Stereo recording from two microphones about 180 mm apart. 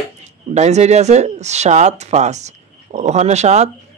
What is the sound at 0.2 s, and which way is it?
Speech, 40° right (ahead or behind).